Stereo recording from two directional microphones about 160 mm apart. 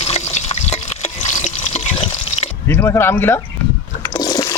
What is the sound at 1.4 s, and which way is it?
Water, 45° left (ahead or behind).